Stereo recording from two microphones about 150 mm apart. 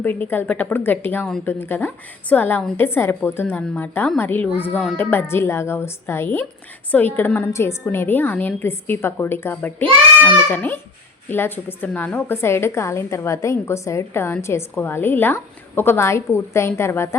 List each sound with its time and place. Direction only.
0.0 s a woman's voice: 10° left (ahead or behind)